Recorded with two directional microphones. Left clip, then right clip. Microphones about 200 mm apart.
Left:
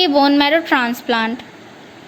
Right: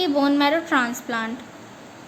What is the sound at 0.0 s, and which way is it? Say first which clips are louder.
A woman's voice: left 7 dB; 20° left (ahead or behind).